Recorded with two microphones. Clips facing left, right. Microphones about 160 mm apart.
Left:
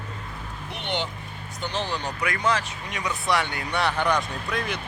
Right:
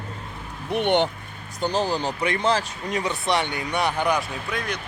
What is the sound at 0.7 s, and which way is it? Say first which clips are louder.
Speech: right 10 dB; 55° right (ahead or behind).